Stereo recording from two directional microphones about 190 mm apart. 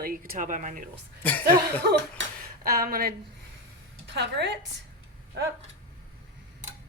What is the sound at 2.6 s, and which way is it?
Speech, 50° right (ahead or behind).